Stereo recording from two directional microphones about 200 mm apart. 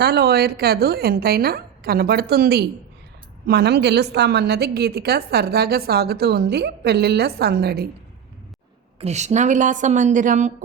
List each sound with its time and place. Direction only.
0.0 s a woman's voice: 55° right (ahead or behind)
9.0 s a woman's voice: 35° right (ahead or behind)